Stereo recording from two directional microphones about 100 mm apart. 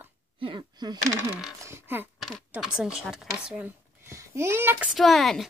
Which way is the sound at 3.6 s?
20° right (ahead or behind).